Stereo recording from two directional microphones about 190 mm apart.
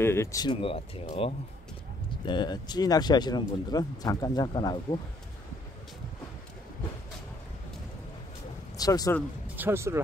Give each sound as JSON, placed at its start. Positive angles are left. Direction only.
{"t": 0.0, "sound": "speech", "side_deg": 15}
{"t": 8.7, "sound": "speech", "side_deg": 20}
{"t": 9.6, "sound": "speech", "side_deg": -15}